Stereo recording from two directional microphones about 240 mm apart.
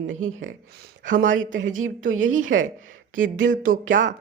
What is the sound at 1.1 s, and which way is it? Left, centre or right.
Speech, right.